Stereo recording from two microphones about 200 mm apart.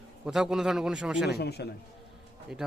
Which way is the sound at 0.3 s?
Centre (ahead or behind).